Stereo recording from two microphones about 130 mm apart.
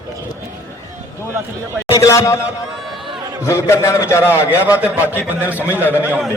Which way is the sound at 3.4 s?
20° left (ahead or behind).